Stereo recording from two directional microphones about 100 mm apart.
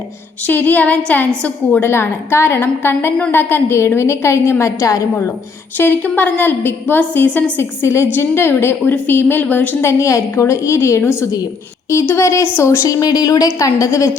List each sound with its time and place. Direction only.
0.4 s a woman's voice: 15° left (ahead or behind)
1.8 s a woman's voice: 25° left (ahead or behind)
5.7 s a woman's voice: 20° left (ahead or behind)
10.0 s a woman's voice: 30° left (ahead or behind)